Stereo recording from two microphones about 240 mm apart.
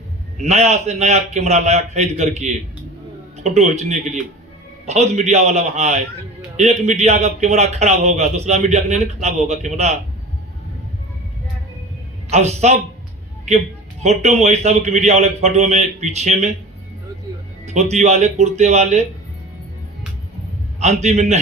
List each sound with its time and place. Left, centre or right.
0.4 s a man's voice: right
12.3 s a man's voice: right
17.7 s a man's voice: right
20.7 s a man's voice: right